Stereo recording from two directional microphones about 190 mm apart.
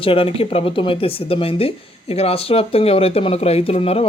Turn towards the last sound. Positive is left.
turn(degrees=30)  # may be behind; listen again after turning